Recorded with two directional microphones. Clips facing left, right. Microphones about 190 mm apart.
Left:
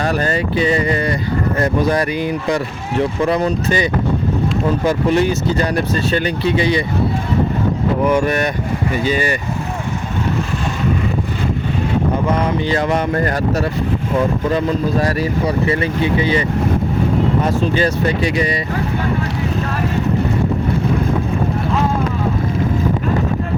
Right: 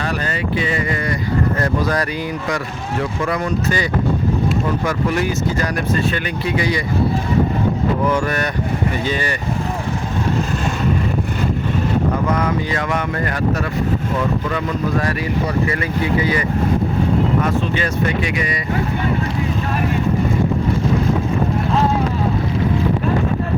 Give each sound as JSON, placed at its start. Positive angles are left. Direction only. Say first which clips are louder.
{"t": 0.0, "sound": "speech", "louder": "left 5 dB", "side_deg": 45}
{"t": 1.5, "sound": "speech", "louder": "left 3 dB", "side_deg": 25}
{"t": 4.9, "sound": "speech", "louder": "left 4 dB", "side_deg": 25}
{"t": 8.1, "sound": "speech", "louder": "left 3 dB", "side_deg": 20}
{"t": 12.3, "sound": "speech", "louder": "left 2 dB", "side_deg": 25}
{"t": 15.6, "sound": "speech", "louder": "left 3 dB", "side_deg": 25}
{"t": 17.4, "sound": "speech", "louder": "left 3 dB", "side_deg": 35}